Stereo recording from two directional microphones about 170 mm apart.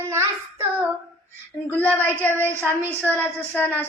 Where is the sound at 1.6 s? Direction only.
10° left (ahead or behind).